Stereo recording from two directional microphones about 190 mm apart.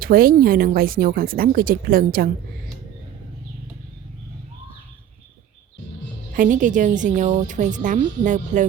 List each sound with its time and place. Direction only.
0.0 s speech: 50° right (ahead or behind)
6.3 s speech: 45° right (ahead or behind)